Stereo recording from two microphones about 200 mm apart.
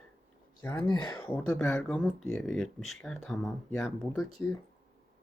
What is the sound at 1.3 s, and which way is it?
Speech, 5° left (ahead or behind).